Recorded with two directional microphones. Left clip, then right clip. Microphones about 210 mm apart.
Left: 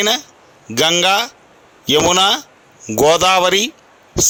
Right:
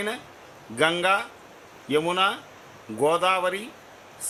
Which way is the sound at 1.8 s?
45° left (ahead or behind).